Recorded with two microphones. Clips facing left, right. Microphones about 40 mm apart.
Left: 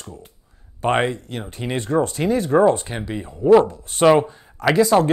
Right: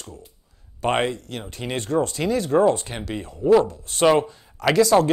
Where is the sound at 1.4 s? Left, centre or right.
Centre.